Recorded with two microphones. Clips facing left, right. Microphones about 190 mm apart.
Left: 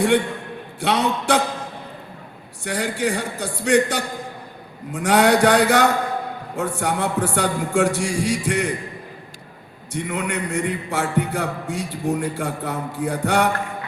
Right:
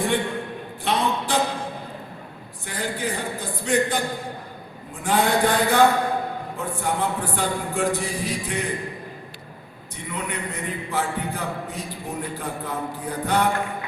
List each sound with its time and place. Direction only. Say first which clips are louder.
0.8 s a man's voice: left 3 dB; 75° left (ahead or behind)
2.6 s a man's voice: left 5 dB; 80° left
9.9 s a man's voice: left 6 dB; 80° left